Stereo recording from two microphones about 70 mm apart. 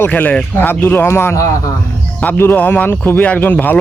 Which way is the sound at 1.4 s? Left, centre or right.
Left.